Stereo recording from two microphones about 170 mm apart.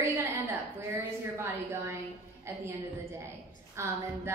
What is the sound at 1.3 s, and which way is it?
Speech, 15° right (ahead or behind).